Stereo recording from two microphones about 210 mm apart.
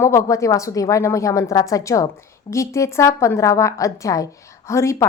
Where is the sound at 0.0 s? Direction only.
15° left (ahead or behind).